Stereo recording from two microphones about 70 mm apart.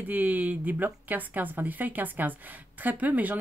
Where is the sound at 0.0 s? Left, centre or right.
Right.